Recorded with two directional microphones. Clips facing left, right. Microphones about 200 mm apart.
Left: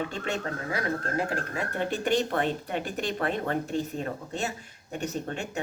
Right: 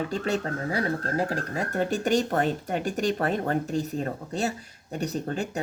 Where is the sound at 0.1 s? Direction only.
35° right (ahead or behind).